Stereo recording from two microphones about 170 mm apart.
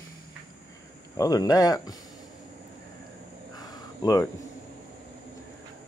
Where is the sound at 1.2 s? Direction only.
20° left (ahead or behind).